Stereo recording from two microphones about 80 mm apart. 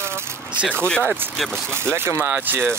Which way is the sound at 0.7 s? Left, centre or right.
Centre.